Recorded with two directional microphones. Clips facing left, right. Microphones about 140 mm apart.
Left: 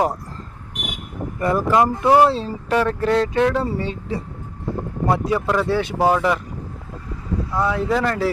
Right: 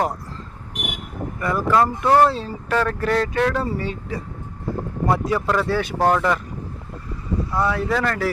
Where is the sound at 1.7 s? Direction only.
20° left (ahead or behind).